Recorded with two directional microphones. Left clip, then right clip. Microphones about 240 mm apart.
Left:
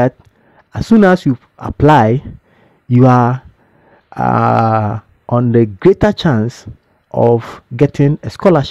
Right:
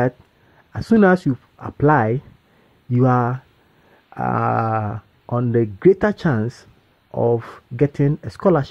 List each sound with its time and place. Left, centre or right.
0.6 s speech: left